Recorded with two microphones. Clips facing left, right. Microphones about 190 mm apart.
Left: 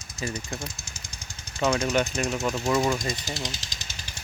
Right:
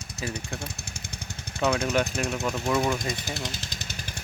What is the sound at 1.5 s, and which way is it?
Speech, centre (ahead or behind).